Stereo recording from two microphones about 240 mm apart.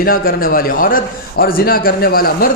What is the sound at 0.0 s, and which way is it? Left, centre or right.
A man's voice, left.